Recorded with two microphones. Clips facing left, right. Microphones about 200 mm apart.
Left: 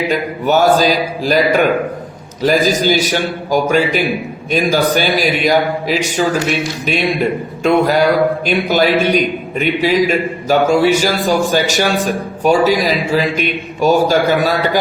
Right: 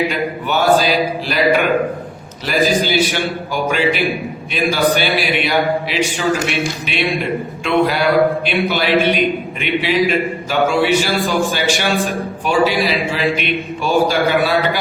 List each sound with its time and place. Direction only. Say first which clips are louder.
0.4 s a man's voice: left 3 dB; 40° left (ahead or behind)